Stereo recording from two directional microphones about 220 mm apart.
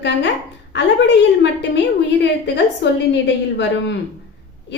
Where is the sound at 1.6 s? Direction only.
50° left (ahead or behind).